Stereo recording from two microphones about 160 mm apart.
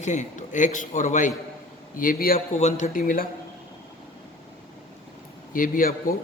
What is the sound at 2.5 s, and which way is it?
Speech, 45° left (ahead or behind).